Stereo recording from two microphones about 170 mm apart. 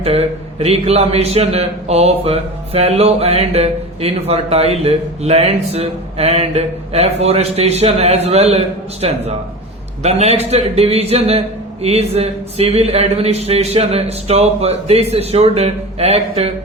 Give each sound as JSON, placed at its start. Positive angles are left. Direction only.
{"t": 0.0, "sound": "a man's voice", "side_deg": -35}